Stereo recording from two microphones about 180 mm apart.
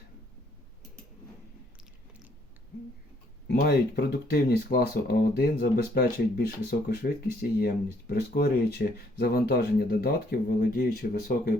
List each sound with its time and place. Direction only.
3.4 s speech: 65° left (ahead or behind)